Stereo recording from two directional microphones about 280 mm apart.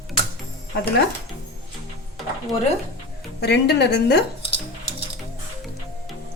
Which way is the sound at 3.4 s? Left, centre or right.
Left.